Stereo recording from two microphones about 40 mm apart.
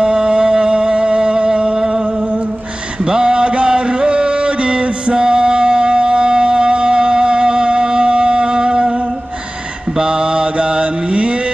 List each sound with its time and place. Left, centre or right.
0.0 s a sound: right
3.1 s music: right
9.9 s mantra: right